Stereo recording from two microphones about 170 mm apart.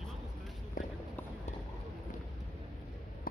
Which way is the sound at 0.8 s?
55° left (ahead or behind).